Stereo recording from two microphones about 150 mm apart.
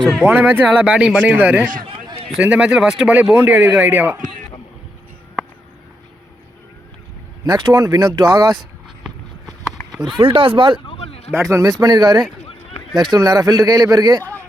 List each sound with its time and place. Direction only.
0.0 s speech: 5° right (ahead or behind)
7.4 s speech: 25° right (ahead or behind)
9.8 s a sound: 20° left (ahead or behind)
10.2 s speech: 35° right (ahead or behind)
10.8 s a sound: 40° left (ahead or behind)
11.3 s speech: 20° right (ahead or behind)